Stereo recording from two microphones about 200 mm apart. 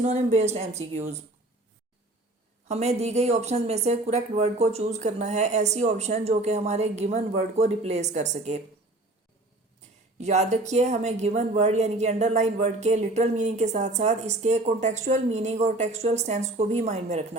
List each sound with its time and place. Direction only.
0.0 s speech: 30° right (ahead or behind)
2.6 s speech: 30° right (ahead or behind)
10.2 s speech: 35° right (ahead or behind)